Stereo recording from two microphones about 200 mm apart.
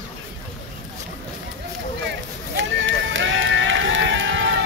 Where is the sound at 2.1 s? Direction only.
65° right (ahead or behind).